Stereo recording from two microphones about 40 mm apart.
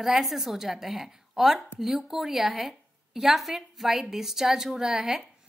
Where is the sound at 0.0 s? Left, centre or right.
Centre.